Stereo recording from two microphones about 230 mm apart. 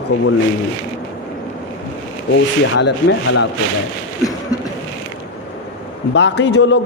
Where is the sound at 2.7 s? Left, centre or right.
Left.